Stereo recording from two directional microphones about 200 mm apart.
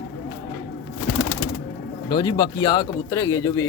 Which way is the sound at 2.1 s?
20° left (ahead or behind).